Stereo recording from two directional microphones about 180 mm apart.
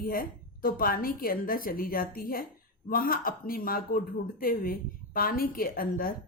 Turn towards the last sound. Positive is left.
turn(degrees=55)  # may be behind; listen again after turning